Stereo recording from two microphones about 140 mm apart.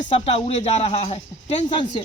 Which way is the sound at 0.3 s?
45° left (ahead or behind).